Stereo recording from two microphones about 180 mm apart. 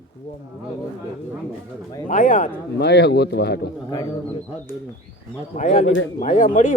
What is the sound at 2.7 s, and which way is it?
Speech, 70° left (ahead or behind).